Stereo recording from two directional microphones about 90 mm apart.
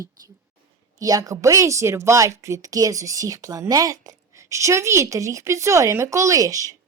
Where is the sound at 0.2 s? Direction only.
45° right (ahead or behind).